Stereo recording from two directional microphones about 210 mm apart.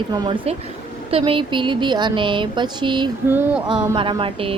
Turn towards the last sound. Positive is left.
turn(degrees=-25)  # may be behind; listen again after turning